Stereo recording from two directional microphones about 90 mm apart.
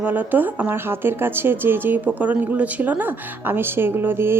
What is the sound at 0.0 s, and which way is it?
Speech, 20° right (ahead or behind).